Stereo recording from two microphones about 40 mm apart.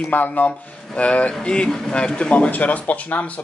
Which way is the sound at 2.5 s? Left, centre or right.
Left.